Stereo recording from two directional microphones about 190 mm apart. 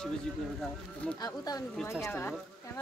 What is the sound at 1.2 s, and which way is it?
Speech, 20° left (ahead or behind).